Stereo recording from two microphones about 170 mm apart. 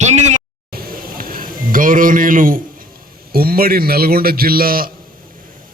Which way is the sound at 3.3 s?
60° right (ahead or behind).